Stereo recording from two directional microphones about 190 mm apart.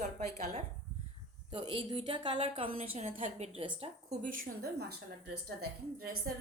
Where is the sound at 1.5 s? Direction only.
30° right (ahead or behind).